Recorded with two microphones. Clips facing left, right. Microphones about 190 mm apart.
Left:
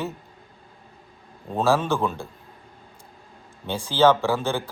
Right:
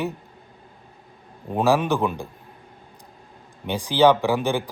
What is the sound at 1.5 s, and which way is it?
Speech, 15° right (ahead or behind).